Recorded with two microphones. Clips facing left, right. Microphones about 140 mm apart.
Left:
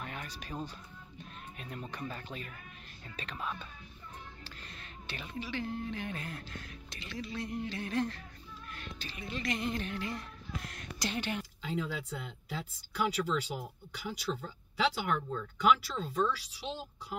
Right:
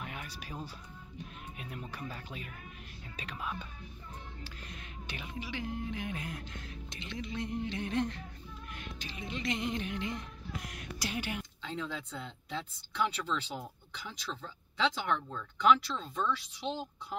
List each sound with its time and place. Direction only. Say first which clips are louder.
0.0 s music: left 1 dB; 10° right (ahead or behind)
1.1 s speech: right 2 dB; 10° right (ahead or behind)
8.7 s music: right 1 dB; 15° right (ahead or behind)
11.6 s speech: left 4 dB; 10° left (ahead or behind)